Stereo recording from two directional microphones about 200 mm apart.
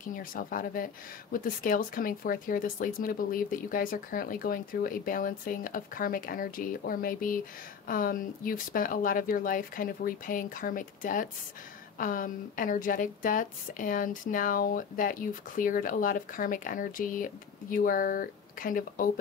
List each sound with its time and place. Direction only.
0.1 s a woman's voice: 45° left (ahead or behind)